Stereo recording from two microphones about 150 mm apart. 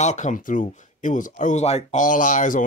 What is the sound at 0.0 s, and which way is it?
Speech, 50° left (ahead or behind).